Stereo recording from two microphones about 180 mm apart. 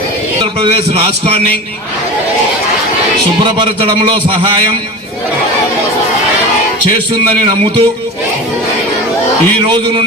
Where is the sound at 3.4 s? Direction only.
25° right (ahead or behind).